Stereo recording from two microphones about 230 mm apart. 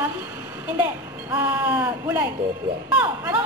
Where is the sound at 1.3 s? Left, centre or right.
Centre.